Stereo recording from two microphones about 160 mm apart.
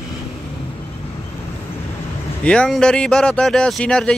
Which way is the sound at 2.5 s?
5° left (ahead or behind).